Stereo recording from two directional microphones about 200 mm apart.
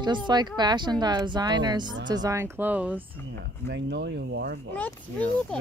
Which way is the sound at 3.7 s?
60° right (ahead or behind).